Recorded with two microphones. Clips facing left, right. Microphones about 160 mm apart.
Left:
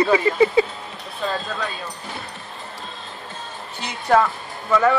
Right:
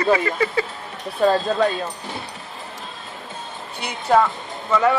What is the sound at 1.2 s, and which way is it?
Speech, 40° right (ahead or behind).